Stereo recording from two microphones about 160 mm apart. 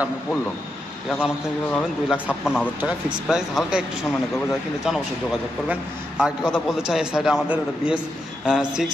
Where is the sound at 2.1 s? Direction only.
5° right (ahead or behind).